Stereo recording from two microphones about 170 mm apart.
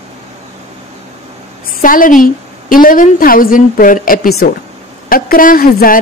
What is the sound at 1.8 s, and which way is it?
A woman's voice, 55° left (ahead or behind).